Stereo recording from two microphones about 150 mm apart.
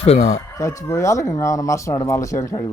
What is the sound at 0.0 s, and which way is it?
Speech, 45° left (ahead or behind).